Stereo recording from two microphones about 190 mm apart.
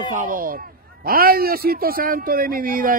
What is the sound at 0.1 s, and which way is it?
A man's voice, 45° right (ahead or behind).